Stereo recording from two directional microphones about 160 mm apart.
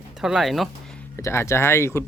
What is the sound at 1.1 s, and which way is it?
Speech, 15° left (ahead or behind).